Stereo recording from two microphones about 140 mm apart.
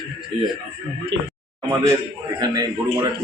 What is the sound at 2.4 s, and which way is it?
Speech, 30° right (ahead or behind).